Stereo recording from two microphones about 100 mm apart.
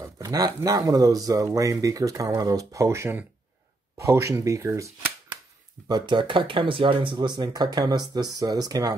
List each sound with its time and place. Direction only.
0.0 s speech: 40° right (ahead or behind)
5.9 s speech: 45° right (ahead or behind)